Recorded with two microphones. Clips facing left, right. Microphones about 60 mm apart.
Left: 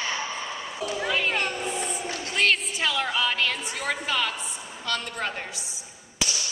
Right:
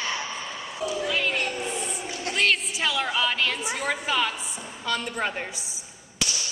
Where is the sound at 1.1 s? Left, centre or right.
Centre.